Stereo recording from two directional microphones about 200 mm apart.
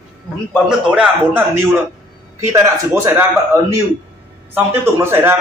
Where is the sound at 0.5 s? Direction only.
5° right (ahead or behind).